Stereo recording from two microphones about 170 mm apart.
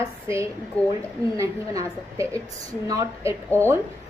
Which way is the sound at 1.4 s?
20° right (ahead or behind).